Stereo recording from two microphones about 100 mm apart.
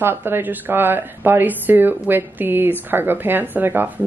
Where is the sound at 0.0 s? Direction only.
20° right (ahead or behind).